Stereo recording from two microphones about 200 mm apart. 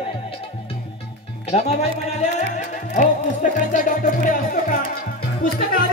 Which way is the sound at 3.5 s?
40° left (ahead or behind).